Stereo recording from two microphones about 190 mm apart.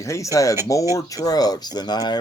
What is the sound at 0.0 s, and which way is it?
Speech, 15° left (ahead or behind).